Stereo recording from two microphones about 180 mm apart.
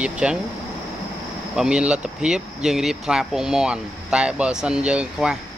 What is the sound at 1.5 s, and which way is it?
Speech, 5° right (ahead or behind).